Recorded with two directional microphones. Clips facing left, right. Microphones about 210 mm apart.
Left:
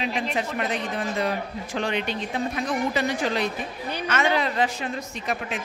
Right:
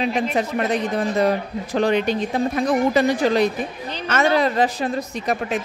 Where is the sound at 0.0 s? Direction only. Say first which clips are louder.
Right 6 dB; 40° right (ahead or behind).